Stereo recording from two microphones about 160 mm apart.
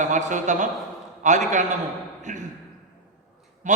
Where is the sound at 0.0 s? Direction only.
50° right (ahead or behind).